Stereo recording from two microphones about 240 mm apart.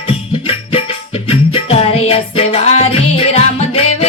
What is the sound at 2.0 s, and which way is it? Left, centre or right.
Music, left.